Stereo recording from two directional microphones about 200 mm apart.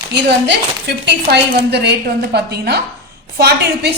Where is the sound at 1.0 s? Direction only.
55° right (ahead or behind).